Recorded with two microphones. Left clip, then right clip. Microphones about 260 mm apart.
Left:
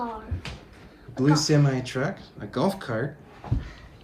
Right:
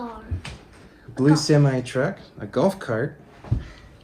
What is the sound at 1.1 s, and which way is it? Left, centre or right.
Speech, centre.